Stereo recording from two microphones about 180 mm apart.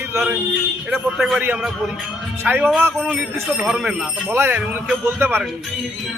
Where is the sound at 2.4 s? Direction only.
10° right (ahead or behind).